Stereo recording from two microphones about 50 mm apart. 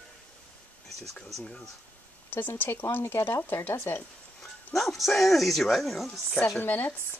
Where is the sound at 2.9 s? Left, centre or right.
Left.